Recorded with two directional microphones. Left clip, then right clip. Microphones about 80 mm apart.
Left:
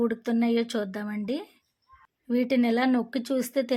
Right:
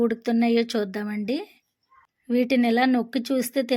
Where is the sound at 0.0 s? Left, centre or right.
Right.